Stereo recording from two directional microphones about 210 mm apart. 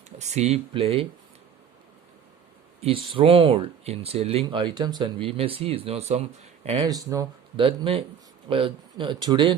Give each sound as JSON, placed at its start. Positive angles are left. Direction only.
{"t": 0.2, "sound": "speech", "side_deg": -30}
{"t": 2.8, "sound": "speech", "side_deg": -25}